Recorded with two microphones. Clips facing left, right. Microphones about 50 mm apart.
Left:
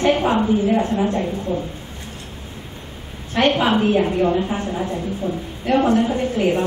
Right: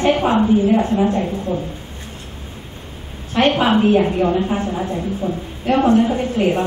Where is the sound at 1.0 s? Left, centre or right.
Centre.